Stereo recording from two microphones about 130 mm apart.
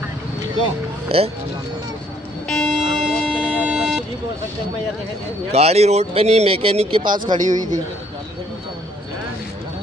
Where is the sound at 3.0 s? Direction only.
5° right (ahead or behind).